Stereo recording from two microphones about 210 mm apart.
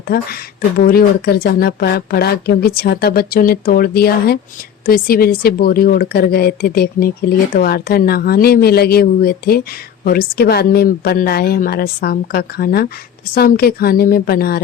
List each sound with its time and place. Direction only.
0.8 s speech: 45° left (ahead or behind)